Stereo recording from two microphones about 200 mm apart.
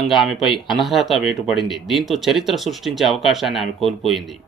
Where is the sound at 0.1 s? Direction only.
Centre (ahead or behind).